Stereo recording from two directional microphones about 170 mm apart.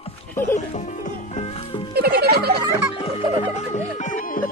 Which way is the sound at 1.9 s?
65° right (ahead or behind).